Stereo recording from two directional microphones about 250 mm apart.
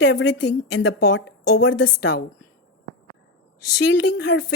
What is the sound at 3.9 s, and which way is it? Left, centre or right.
Speech, left.